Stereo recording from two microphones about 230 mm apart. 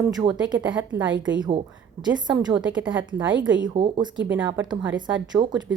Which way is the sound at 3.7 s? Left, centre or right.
Right.